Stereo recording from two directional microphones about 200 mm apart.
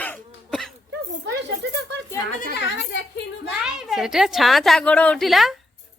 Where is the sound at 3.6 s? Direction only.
Centre (ahead or behind).